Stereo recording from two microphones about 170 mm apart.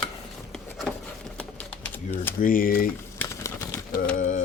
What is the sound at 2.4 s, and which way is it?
Speech, 55° left (ahead or behind).